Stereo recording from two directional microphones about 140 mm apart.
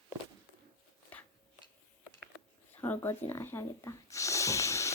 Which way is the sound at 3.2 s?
15° left (ahead or behind).